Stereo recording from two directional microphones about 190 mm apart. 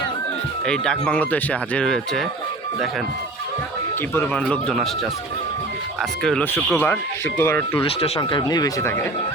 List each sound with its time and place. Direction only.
0.7 s speech: 5° left (ahead or behind)
4.1 s speech: 10° left (ahead or behind)
6.0 s speech: 5° left (ahead or behind)
7.8 s speech: 30° left (ahead or behind)